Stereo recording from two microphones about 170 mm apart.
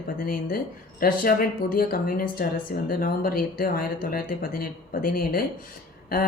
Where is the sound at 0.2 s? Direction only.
60° left (ahead or behind).